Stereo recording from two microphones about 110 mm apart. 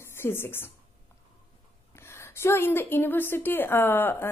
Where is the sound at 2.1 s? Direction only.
25° left (ahead or behind).